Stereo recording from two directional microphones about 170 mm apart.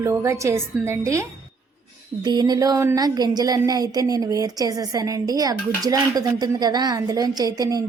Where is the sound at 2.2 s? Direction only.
25° right (ahead or behind).